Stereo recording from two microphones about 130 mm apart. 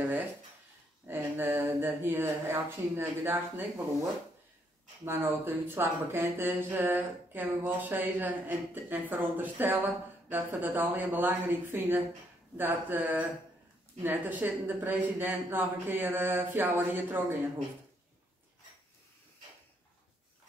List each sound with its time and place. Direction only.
1.1 s speech: 20° right (ahead or behind)